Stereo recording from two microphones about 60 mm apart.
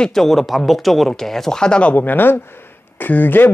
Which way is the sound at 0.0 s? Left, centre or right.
Centre.